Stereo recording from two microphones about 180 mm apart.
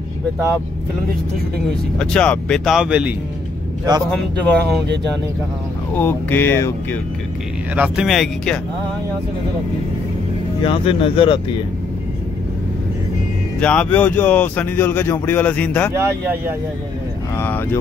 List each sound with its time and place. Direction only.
2.0 s speech: 5° left (ahead or behind)
5.9 s speech: 10° left (ahead or behind)
7.7 s speech: 5° right (ahead or behind)
10.6 s speech: 30° left (ahead or behind)
13.6 s speech: 5° left (ahead or behind)
15.9 s speech: 15° right (ahead or behind)